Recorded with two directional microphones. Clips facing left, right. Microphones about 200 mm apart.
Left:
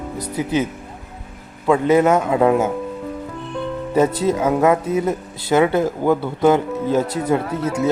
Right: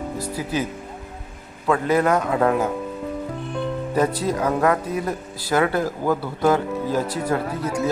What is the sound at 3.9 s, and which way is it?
A man's voice, 25° left (ahead or behind).